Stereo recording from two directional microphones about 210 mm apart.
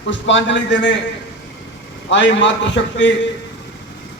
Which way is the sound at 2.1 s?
60° left (ahead or behind).